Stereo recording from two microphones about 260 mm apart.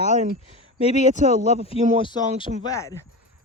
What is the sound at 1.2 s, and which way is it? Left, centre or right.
Speech, right.